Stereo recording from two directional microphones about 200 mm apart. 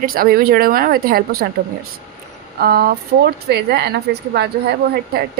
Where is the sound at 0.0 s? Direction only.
45° right (ahead or behind).